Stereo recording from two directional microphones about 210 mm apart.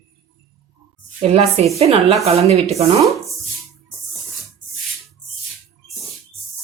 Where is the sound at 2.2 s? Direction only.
30° right (ahead or behind).